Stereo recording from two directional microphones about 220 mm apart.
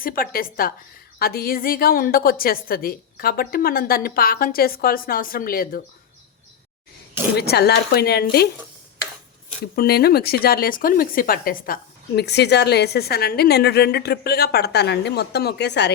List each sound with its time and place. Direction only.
0.0 s a woman's voice: 40° left (ahead or behind)
7.3 s speech: 45° left (ahead or behind)
9.7 s speech: 45° left (ahead or behind)